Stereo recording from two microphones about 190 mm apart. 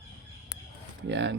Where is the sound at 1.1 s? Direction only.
70° right (ahead or behind).